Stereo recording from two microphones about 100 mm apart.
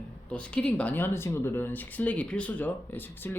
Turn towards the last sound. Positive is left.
turn(degrees=20)  # may be behind; listen again after turning